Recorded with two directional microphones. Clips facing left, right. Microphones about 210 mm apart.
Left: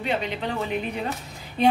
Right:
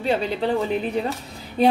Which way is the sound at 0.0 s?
35° right (ahead or behind).